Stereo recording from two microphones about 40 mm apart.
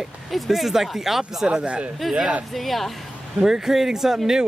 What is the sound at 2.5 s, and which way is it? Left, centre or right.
Speech, centre.